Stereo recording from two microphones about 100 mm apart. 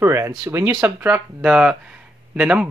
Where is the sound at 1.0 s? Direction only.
10° right (ahead or behind).